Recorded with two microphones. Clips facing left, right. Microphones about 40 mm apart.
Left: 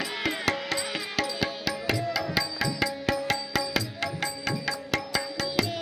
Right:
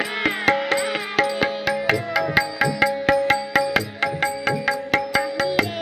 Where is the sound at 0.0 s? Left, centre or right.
Right.